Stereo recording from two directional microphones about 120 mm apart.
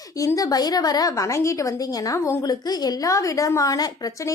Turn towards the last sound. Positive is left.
turn(degrees=30)  # may be behind; listen again after turning